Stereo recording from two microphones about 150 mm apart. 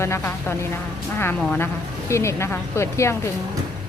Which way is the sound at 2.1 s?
20° left (ahead or behind).